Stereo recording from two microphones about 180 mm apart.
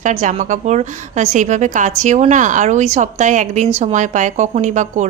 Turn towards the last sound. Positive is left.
turn(degrees=-40)  # may be behind; listen again after turning